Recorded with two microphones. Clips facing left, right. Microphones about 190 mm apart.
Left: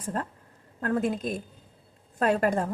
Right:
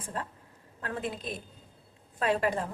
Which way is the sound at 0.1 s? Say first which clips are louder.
Left 5 dB; 45° left (ahead or behind).